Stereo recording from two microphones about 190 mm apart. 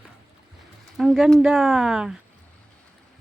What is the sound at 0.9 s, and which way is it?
Speech, centre (ahead or behind).